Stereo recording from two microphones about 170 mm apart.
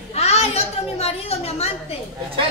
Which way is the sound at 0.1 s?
40° left (ahead or behind).